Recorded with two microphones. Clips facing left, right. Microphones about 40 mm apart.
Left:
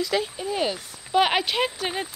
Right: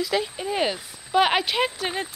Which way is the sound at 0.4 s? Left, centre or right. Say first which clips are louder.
Right 1 dB; centre.